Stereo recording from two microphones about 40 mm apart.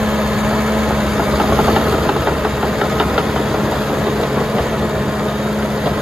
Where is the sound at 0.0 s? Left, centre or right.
Centre.